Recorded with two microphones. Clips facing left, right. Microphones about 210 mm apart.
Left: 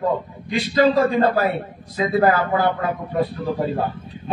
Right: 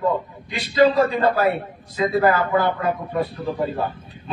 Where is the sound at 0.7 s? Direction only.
50° left (ahead or behind).